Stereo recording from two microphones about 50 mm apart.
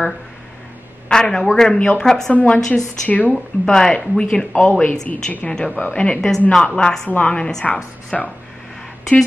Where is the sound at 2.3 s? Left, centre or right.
Left.